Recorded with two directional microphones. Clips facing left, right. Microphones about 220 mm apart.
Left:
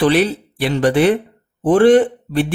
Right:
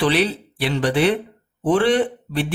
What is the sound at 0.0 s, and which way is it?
Speech, 50° left (ahead or behind).